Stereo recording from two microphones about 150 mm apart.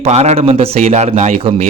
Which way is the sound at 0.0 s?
45° right (ahead or behind).